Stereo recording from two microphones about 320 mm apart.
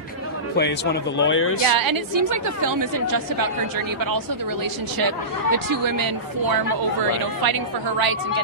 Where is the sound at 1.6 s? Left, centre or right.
Right.